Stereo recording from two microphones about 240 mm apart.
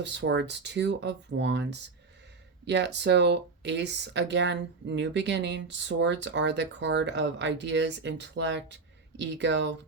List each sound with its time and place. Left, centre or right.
0.0 s speech: right